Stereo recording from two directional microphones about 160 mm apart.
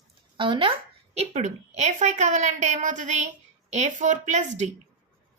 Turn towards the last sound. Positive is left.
turn(degrees=-45)  # may be behind; listen again after turning